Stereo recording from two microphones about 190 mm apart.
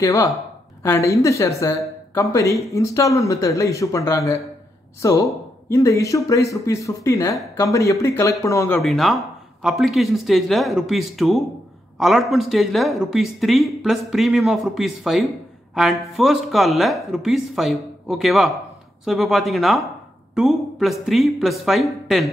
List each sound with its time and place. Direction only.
0.0 s speech: 15° left (ahead or behind)
8.7 s speech: centre (ahead or behind)